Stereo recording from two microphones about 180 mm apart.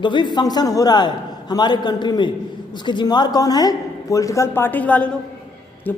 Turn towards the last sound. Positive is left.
turn(degrees=10)  # may be behind; listen again after turning